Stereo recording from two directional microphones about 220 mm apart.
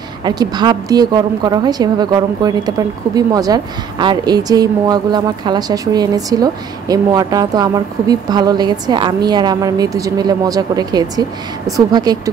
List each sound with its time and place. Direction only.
0.2 s a woman's voice: 20° right (ahead or behind)